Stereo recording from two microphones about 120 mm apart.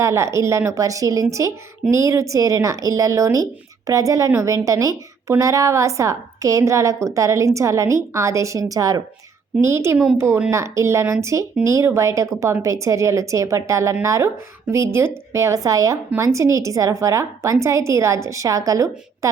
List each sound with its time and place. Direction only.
0.0 s speech: 25° right (ahead or behind)